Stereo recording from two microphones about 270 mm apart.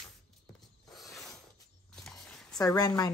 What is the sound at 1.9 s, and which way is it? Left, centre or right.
Walk, centre.